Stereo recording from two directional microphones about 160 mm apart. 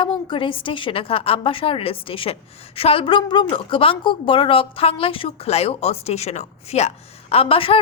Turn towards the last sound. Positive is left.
turn(degrees=35)  # may be behind; listen again after turning